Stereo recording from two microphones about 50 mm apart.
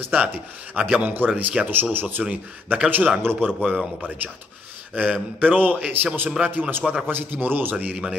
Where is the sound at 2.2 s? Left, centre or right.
Centre.